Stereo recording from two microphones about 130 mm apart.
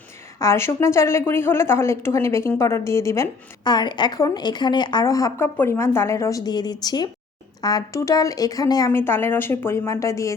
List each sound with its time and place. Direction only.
0.3 s a woman's voice: 20° left (ahead or behind)
3.6 s a woman's voice: 35° left (ahead or behind)
8.9 s a woman's voice: 15° left (ahead or behind)